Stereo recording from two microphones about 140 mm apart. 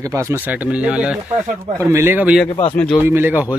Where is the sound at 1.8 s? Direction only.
20° right (ahead or behind).